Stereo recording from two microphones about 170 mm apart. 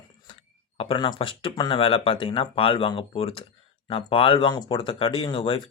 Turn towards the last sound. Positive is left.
turn(degrees=30)  # may be behind; listen again after turning